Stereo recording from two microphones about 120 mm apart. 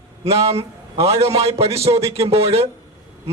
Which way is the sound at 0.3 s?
60° right (ahead or behind).